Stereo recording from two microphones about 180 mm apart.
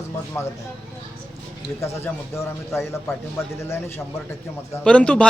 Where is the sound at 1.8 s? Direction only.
15° left (ahead or behind).